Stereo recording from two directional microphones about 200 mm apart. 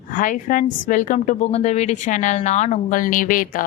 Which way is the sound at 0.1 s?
40° left (ahead or behind).